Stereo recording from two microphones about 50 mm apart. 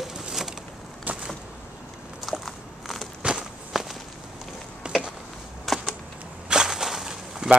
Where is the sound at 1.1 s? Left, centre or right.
Right.